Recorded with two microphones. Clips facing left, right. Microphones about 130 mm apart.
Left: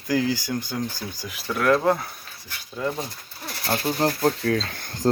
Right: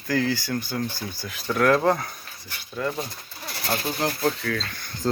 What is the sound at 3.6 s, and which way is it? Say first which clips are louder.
Speech: left 3 dB; 35° left (ahead or behind).